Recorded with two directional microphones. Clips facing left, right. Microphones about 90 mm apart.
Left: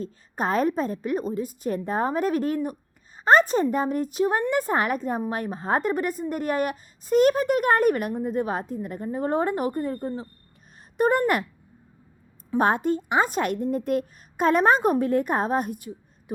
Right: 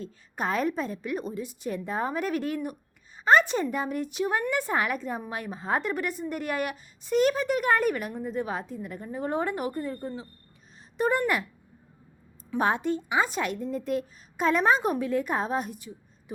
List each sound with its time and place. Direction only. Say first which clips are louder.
0.0 s a woman's voice: left 4 dB; 40° left (ahead or behind)
12.5 s a woman's voice: left 4 dB; 45° left (ahead or behind)